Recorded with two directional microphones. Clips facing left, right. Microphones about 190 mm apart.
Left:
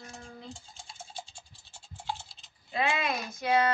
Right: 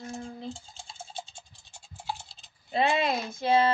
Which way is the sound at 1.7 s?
10° right (ahead or behind).